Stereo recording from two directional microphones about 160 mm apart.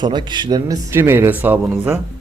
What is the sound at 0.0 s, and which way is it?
Speech, 30° right (ahead or behind).